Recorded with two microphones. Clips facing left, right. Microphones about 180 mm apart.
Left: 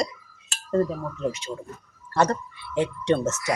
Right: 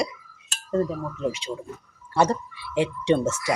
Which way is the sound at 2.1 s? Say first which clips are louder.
Right 1 dB; 10° right (ahead or behind).